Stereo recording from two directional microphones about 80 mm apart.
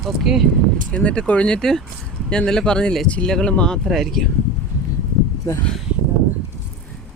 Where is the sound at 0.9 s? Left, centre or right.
Centre.